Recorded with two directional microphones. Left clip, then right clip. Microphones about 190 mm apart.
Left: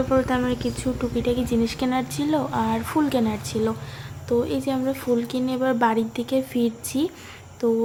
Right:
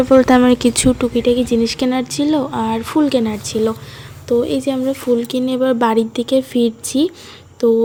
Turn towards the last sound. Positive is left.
turn(degrees=-25)  # may be behind; listen again after turning